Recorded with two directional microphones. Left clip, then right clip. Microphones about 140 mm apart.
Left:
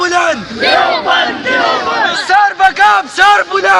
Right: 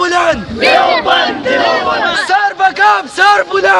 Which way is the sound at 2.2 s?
90° right.